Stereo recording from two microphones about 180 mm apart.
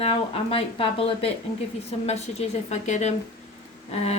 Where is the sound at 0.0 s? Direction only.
30° left (ahead or behind).